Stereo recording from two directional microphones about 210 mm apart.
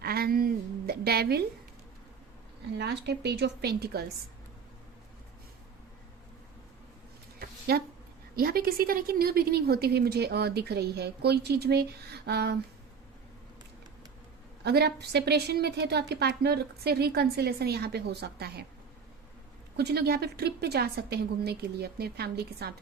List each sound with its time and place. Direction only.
0.0 s a sound: 45° right (ahead or behind)
2.7 s a woman's voice: 50° right (ahead or behind)
7.7 s a woman's voice: 45° right (ahead or behind)
14.6 s a woman's voice: 50° right (ahead or behind)
19.7 s a woman's voice: 50° right (ahead or behind)